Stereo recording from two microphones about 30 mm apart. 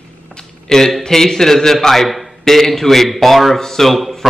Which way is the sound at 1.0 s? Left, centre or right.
Centre.